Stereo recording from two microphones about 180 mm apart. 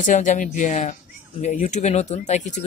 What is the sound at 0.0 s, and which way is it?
Speech, 45° left (ahead or behind).